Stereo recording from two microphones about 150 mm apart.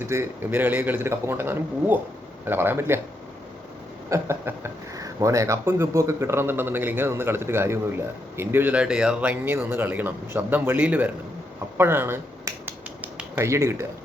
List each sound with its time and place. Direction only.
0.1 s speech: 15° right (ahead or behind)
4.1 s speech: 15° right (ahead or behind)
11.8 s finger snapping: 15° right (ahead or behind)